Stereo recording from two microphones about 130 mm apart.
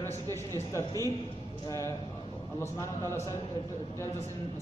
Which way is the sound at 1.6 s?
25° left (ahead or behind).